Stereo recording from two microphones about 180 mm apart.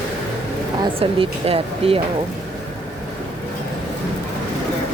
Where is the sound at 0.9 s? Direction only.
30° right (ahead or behind).